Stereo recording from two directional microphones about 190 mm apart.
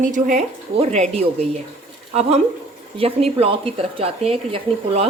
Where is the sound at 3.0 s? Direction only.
30° right (ahead or behind).